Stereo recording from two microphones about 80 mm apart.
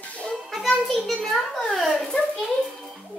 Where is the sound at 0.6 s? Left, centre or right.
Centre.